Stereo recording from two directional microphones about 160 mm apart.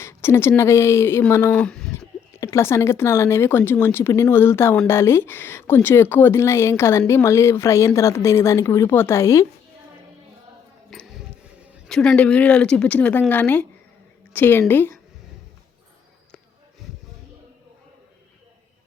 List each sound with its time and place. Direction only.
0.0 s speech: 15° left (ahead or behind)
1.9 s speech: 15° left (ahead or behind)
10.9 s a sound: centre (ahead or behind)
11.9 s speech: 5° left (ahead or behind)